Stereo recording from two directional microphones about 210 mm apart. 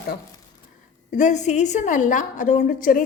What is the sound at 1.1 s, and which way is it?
A woman's voice, 35° left (ahead or behind).